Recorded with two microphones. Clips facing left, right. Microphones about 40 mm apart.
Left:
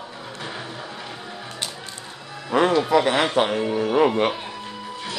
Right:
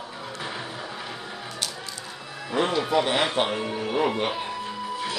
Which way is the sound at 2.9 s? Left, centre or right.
Left.